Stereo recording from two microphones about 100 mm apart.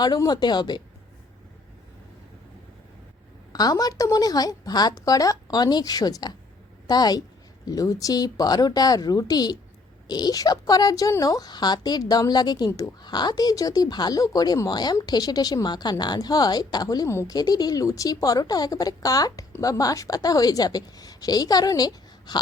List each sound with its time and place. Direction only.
0.0 s speech: 45° left (ahead or behind)
3.5 s a woman's voice: 40° left (ahead or behind)
17.1 s speech: 25° left (ahead or behind)
17.3 s a woman's voice: 40° left (ahead or behind)